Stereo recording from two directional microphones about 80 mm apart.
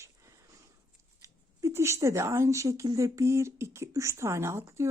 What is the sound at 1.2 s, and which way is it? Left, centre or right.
Speech, right.